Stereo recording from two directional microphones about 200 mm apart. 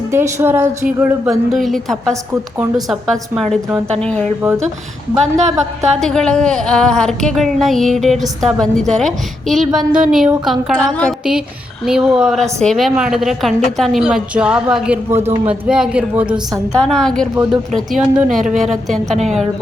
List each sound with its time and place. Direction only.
0.1 s a woman's voice: 10° right (ahead or behind); by 4.3 s 5° left (ahead or behind)
5.9 s speech: 5° left (ahead or behind)
19.1 s a woman's voice: 35° right (ahead or behind)